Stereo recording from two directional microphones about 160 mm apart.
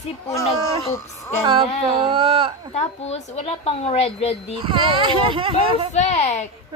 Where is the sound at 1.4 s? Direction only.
35° right (ahead or behind).